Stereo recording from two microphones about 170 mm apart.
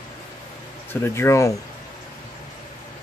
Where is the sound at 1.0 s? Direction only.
15° left (ahead or behind).